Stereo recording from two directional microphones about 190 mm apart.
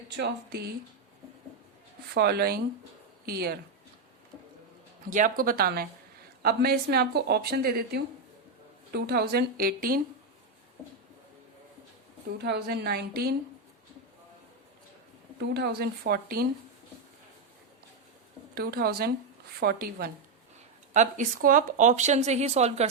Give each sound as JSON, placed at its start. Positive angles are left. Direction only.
{"t": 0.2, "sound": "speech", "side_deg": -60}
{"t": 2.1, "sound": "speech", "side_deg": -55}
{"t": 5.0, "sound": "speech", "side_deg": -45}
{"t": 12.4, "sound": "speech", "side_deg": -60}
{"t": 15.4, "sound": "speech", "side_deg": -55}
{"t": 18.5, "sound": "speech", "side_deg": -55}
{"t": 20.9, "sound": "speech", "side_deg": -40}